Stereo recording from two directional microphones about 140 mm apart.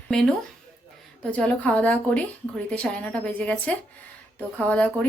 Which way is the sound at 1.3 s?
10° left (ahead or behind).